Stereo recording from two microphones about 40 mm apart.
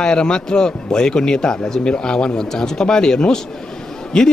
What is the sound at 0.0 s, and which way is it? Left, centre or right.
A man's voice, centre.